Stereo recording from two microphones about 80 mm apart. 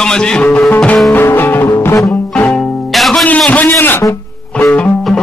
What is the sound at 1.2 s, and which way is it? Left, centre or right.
Music, left.